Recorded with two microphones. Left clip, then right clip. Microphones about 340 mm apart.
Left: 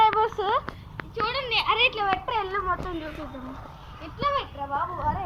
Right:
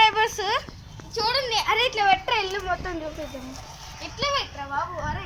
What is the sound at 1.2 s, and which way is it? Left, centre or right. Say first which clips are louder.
A child's voice: right 2 dB; centre.